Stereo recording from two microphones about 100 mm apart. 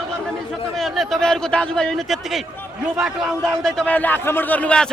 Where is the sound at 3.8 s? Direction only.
15° left (ahead or behind).